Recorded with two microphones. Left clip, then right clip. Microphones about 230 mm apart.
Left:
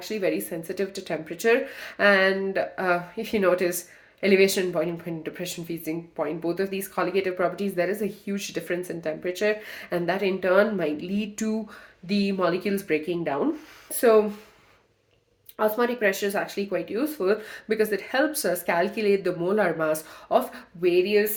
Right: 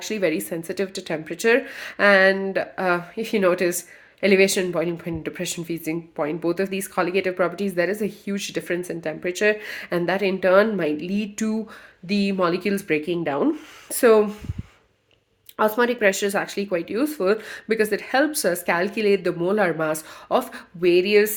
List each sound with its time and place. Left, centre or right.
0.0 s speech: right
15.5 s speech: right